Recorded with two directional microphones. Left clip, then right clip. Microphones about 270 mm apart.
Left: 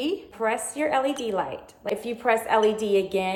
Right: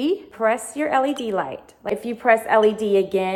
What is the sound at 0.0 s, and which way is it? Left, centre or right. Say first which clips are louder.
A woman's voice: right 6 dB; right.